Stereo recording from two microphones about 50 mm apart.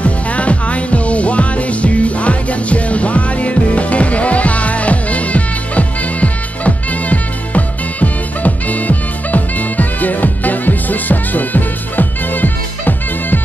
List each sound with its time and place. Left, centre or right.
0.0 s music: left